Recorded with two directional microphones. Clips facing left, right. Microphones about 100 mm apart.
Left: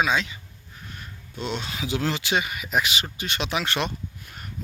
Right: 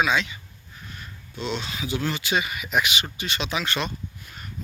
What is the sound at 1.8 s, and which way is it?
Speech, 90° left.